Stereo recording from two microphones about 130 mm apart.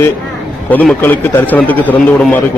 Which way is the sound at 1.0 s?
15° left (ahead or behind).